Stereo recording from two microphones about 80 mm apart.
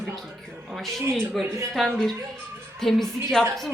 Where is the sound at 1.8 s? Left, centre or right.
Centre.